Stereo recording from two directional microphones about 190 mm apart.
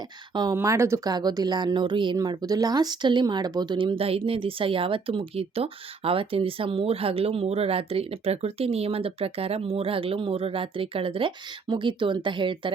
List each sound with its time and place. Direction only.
0.3 s speech: 20° right (ahead or behind)